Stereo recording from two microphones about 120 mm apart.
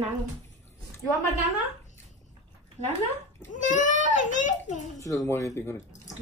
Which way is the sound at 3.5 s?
90° left.